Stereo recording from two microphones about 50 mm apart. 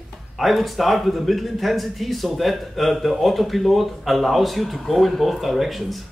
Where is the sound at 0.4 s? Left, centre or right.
Centre.